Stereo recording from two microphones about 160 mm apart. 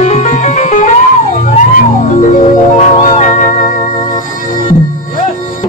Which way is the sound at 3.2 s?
50° left (ahead or behind).